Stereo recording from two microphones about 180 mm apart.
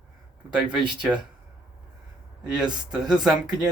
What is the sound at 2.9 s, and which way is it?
Speech, 5° right (ahead or behind).